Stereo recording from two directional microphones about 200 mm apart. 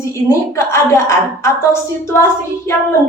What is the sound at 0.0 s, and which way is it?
A woman's voice, 15° left (ahead or behind).